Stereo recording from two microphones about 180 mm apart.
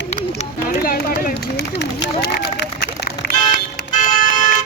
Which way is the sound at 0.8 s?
50° left (ahead or behind).